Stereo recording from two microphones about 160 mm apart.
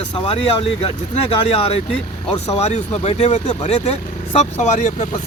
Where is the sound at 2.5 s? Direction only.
45° left (ahead or behind).